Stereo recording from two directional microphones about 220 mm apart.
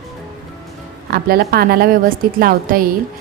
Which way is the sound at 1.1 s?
45° right (ahead or behind).